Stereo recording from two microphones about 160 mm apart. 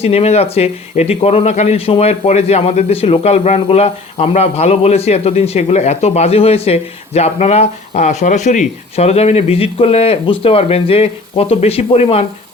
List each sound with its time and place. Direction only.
0.0 s a man's voice: 40° left (ahead or behind)